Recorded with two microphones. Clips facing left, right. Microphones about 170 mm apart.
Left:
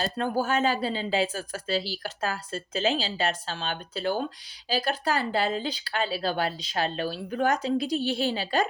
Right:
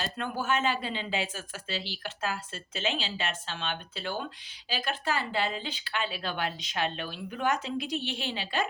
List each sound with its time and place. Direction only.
0.0 s speech: 40° left (ahead or behind)